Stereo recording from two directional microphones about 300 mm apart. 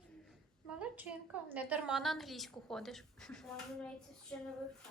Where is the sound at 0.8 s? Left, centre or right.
Centre.